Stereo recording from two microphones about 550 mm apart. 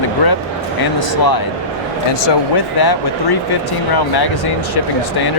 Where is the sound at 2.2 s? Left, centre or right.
Left.